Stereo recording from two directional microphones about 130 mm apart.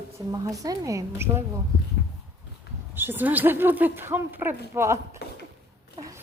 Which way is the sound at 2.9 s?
15° right (ahead or behind).